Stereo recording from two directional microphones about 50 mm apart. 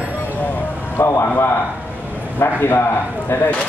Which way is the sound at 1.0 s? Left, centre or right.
Left.